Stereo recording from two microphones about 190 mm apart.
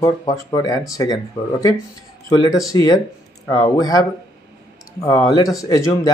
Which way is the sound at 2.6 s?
20° left (ahead or behind).